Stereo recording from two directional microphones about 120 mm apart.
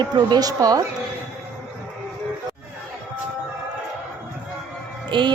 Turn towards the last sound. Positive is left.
turn(degrees=-40)  # may be behind; listen again after turning